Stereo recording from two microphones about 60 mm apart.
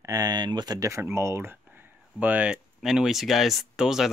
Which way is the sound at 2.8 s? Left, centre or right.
Centre.